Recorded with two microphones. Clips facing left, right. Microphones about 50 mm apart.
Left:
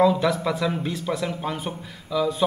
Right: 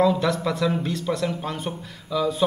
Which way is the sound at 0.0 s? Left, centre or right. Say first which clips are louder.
Left 1 dB; centre.